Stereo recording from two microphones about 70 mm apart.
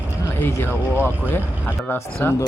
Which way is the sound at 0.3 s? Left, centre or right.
Left.